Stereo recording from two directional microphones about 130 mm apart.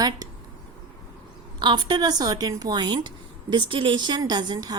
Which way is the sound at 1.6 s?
35° right (ahead or behind).